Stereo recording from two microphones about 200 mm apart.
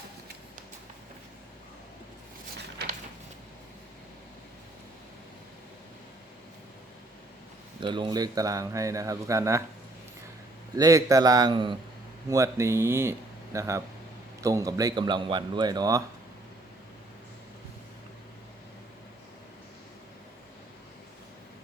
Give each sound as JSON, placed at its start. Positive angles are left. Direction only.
{"t": 2.6, "sound": "a sound", "side_deg": -55}
{"t": 7.8, "sound": "speech", "side_deg": -25}
{"t": 10.8, "sound": "a man's voice", "side_deg": -15}